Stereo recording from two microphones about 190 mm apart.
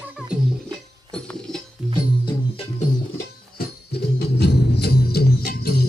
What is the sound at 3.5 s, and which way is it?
Music, 60° left (ahead or behind).